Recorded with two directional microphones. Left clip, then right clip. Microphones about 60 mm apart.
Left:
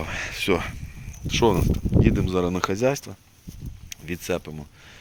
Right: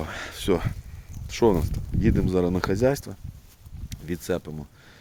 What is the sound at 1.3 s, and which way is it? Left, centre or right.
Speech, right.